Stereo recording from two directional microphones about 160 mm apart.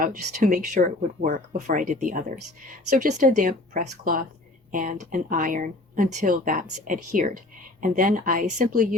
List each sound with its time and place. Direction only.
0.0 s speech: 50° right (ahead or behind)